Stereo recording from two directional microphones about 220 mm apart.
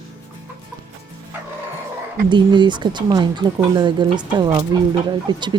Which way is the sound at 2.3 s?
20° right (ahead or behind).